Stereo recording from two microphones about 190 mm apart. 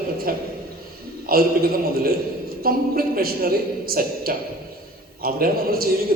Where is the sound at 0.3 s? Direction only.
50° right (ahead or behind).